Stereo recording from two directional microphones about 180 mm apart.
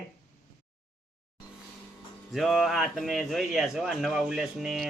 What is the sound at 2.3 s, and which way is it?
Speech, centre (ahead or behind).